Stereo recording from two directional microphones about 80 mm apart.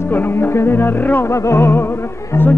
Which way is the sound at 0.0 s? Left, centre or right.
Left.